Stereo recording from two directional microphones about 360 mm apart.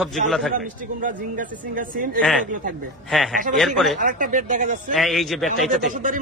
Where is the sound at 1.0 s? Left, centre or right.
Right.